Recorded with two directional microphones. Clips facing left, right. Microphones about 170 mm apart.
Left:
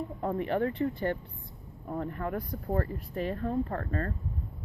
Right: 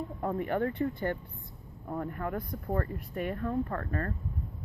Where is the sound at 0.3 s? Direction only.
25° left (ahead or behind).